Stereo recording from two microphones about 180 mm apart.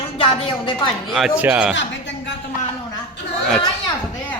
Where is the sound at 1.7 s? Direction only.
85° left.